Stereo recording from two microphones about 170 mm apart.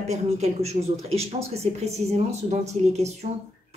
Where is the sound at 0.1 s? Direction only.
40° right (ahead or behind).